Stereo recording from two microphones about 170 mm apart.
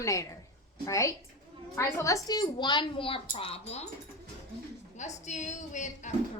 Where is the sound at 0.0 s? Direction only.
20° left (ahead or behind); by 3.8 s 35° left (ahead or behind).